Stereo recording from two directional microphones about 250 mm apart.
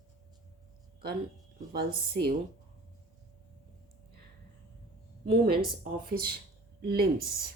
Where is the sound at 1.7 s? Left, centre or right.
Right.